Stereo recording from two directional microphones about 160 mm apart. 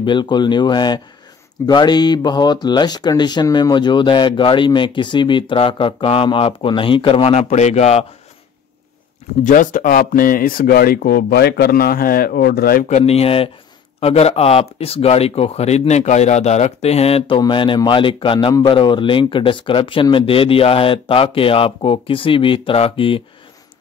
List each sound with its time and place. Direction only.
0.0 s speech: 30° left (ahead or behind)
9.4 s speech: 55° left (ahead or behind); by 12.8 s 70° left (ahead or behind)
12.8 s a man's voice: 45° left (ahead or behind)